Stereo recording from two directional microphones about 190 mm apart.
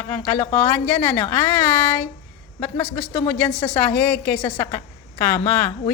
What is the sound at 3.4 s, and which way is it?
A woman's voice, 5° left (ahead or behind).